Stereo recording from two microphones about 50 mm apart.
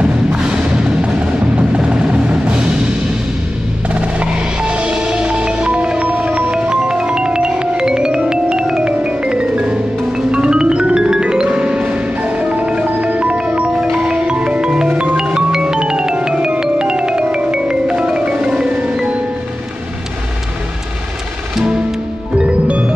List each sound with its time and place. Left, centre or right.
0.0 s music: right
3.9 s percussion: right
10.3 s music: centre
12.8 s marimba: right; by 14.9 s centre
15.1 s music: centre
22.4 s music: right